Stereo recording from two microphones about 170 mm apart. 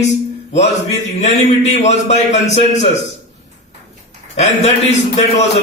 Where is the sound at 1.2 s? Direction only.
40° left (ahead or behind).